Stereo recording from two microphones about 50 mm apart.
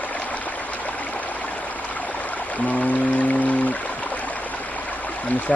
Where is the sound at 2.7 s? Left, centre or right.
Left.